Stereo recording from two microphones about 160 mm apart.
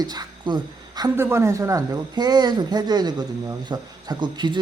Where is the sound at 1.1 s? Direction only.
15° right (ahead or behind).